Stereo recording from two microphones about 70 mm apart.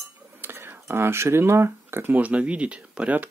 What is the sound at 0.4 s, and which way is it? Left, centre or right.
Speech, right.